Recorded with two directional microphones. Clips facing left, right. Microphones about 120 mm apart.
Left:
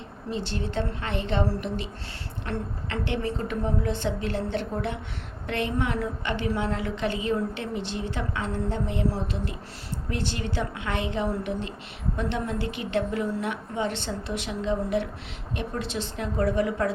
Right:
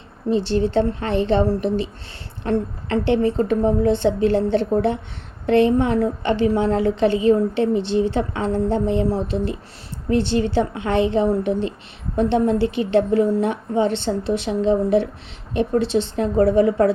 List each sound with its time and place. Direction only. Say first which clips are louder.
0.3 s a woman's voice: right 12 dB; 30° right (ahead or behind)